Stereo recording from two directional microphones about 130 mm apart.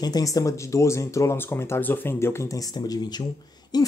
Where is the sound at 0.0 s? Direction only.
30° left (ahead or behind).